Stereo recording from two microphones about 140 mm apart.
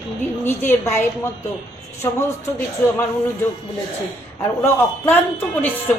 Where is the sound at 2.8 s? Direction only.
15° left (ahead or behind).